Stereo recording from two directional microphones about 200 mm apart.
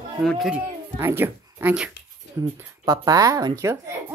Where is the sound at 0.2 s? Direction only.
Centre (ahead or behind).